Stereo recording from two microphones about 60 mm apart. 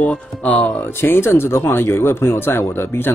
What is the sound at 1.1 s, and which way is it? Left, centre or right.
Speech, left.